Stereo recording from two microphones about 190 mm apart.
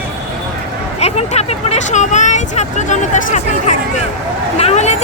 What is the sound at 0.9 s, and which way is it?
Vehicle, 35° left (ahead or behind).